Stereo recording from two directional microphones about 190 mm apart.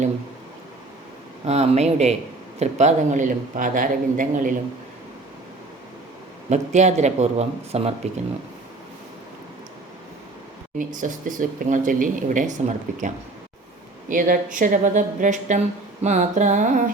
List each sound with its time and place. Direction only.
1.5 s speech: 35° right (ahead or behind)
6.5 s speech: 35° right (ahead or behind)
10.8 s speech: 45° right (ahead or behind)